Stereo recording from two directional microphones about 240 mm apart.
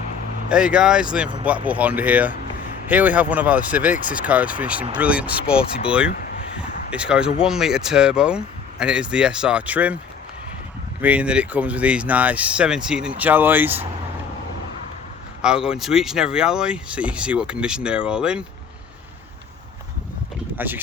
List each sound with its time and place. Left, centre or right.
0.4 s speech: centre
6.1 s a sound: left
6.6 s a sound: centre
7.4 s speech: centre
11.0 s speech: centre
15.4 s speech: centre
20.6 s speech: centre